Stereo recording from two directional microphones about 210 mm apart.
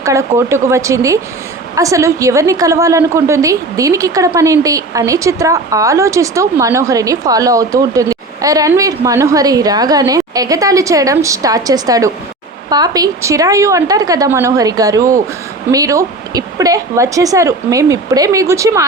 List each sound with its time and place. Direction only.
0.0 s a woman's voice: 15° right (ahead or behind)